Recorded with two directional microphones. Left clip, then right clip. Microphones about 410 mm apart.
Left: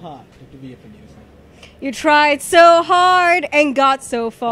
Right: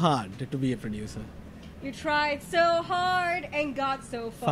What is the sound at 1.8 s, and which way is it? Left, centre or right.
Speech, left.